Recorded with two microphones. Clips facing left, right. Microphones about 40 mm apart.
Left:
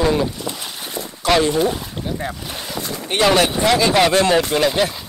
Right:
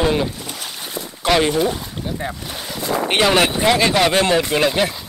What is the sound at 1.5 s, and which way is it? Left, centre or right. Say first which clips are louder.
Speech: left 1 dB; centre.